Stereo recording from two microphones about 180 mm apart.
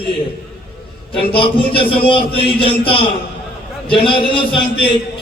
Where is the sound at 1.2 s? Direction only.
30° left (ahead or behind).